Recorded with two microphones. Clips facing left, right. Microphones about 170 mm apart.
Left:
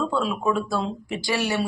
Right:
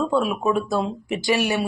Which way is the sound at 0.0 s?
20° right (ahead or behind).